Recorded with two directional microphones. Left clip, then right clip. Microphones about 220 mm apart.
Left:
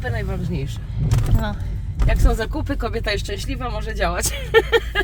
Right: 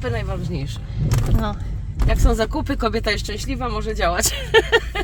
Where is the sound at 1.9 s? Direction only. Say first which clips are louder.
Right 2 dB; 15° right (ahead or behind).